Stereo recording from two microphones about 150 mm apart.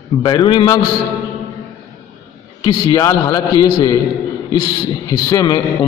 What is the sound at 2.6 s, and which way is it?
A man's voice, 30° left (ahead or behind).